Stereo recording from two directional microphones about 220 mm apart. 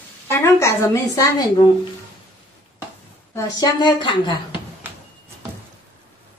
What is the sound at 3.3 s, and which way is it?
A woman's voice, 20° left (ahead or behind).